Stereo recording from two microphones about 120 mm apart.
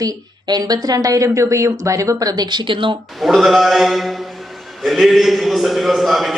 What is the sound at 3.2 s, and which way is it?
A man's voice, centre (ahead or behind).